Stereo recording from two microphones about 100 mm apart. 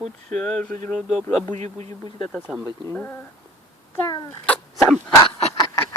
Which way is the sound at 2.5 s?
5° right (ahead or behind).